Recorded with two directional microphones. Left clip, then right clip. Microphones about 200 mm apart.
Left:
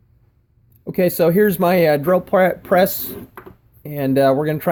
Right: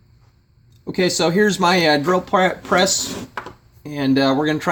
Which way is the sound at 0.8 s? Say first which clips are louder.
Left 2 dB; 45° left (ahead or behind).